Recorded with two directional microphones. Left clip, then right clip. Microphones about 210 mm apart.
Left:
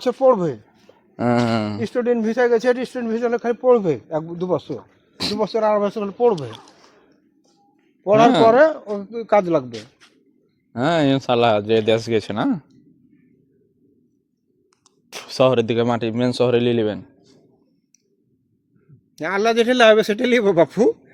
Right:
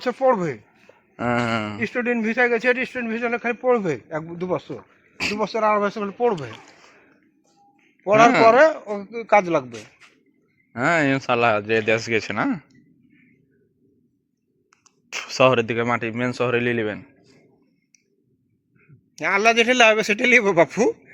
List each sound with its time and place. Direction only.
0.1 s a man's voice: 55° left (ahead or behind)
1.1 s a man's voice: 45° left (ahead or behind)
8.0 s a woman's voice: 55° left (ahead or behind)
10.7 s speech: 30° left (ahead or behind)
15.1 s a sound: 30° left (ahead or behind)
15.7 s speech: 40° left (ahead or behind)
16.6 s a man's voice: 50° left (ahead or behind)
19.1 s a man's voice: 55° left (ahead or behind)